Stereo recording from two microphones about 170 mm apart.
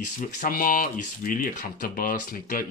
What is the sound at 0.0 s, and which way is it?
Speech, 50° left (ahead or behind).